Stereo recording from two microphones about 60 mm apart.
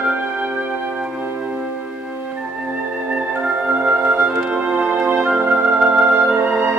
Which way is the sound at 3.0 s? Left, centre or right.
Right.